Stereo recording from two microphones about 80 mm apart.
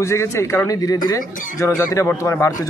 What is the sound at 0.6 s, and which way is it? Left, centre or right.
A man's voice, left.